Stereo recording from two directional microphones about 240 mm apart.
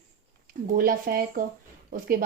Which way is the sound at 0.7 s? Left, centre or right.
Right.